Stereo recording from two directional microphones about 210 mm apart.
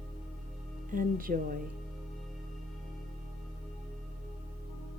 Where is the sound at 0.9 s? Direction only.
40° right (ahead or behind).